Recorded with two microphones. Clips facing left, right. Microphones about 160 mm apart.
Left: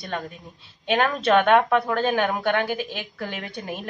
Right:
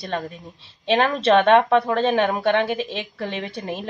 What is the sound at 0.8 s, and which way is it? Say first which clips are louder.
A woman's voice: right 3 dB; 30° right (ahead or behind).